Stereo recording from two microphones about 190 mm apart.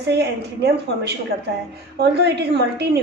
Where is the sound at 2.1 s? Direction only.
60° right (ahead or behind).